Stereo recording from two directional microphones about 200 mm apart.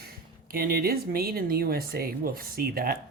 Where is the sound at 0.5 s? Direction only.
45° right (ahead or behind).